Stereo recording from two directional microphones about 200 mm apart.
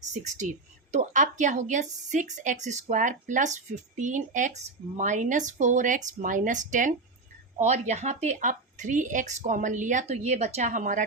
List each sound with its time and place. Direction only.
0.0 s speech: 35° right (ahead or behind)